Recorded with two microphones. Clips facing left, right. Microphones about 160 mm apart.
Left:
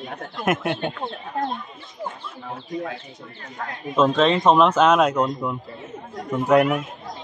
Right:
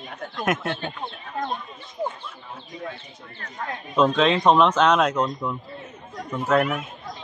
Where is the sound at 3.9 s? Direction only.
Centre (ahead or behind).